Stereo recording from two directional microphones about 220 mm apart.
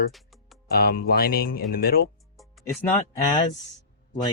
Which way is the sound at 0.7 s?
45° left (ahead or behind).